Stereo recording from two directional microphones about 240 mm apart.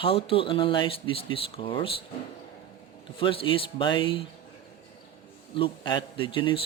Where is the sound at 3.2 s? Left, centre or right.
Left.